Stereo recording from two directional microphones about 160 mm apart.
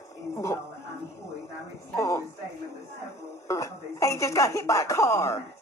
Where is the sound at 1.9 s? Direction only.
20° left (ahead or behind).